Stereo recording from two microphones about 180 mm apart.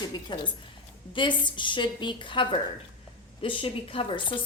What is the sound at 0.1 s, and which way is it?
A woman's voice, 25° left (ahead or behind).